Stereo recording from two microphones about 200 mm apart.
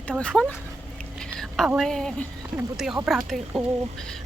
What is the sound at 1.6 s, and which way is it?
Speech, centre (ahead or behind).